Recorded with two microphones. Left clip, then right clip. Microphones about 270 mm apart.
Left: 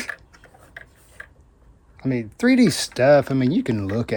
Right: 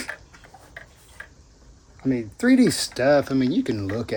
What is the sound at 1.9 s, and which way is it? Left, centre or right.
Speech, left.